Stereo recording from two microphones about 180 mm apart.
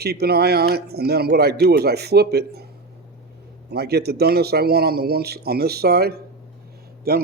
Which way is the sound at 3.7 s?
65° right (ahead or behind).